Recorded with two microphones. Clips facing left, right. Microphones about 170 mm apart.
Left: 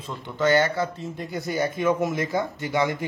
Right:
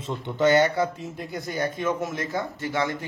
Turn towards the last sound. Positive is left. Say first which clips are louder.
# left 3 dB
turn(degrees=15)  # may be behind; listen again after turning